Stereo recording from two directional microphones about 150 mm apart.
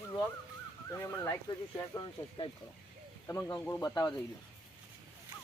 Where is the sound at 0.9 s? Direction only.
20° left (ahead or behind).